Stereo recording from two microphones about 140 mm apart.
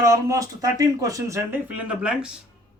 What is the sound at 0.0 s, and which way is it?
Speech, 25° right (ahead or behind).